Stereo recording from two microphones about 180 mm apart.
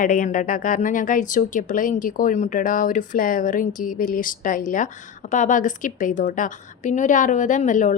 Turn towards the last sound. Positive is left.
turn(degrees=45)  # may be behind; listen again after turning